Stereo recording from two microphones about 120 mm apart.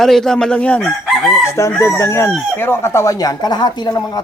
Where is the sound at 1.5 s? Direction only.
25° left (ahead or behind).